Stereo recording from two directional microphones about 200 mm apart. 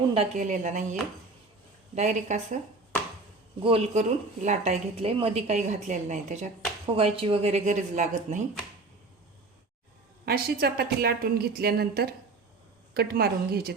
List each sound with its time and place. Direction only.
0.1 s a woman's voice: 35° right (ahead or behind)
2.0 s a woman's voice: 35° right (ahead or behind)
3.6 s a woman's voice: 30° right (ahead or behind)
10.2 s a woman's voice: 50° right (ahead or behind)